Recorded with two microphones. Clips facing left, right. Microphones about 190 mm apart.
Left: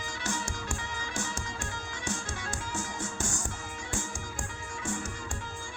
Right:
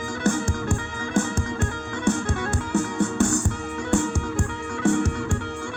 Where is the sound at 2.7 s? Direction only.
60° right (ahead or behind).